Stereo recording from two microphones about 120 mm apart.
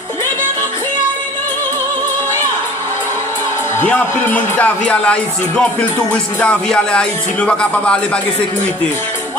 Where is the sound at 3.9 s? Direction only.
15° left (ahead or behind).